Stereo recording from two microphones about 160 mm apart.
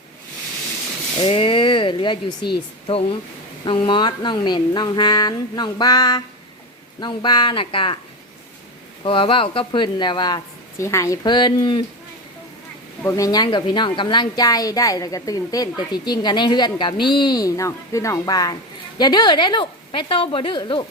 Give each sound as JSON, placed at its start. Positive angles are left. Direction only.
{"t": 1.2, "sound": "speech", "side_deg": 35}
{"t": 9.0, "sound": "speech", "side_deg": 35}
{"t": 13.0, "sound": "speech", "side_deg": 20}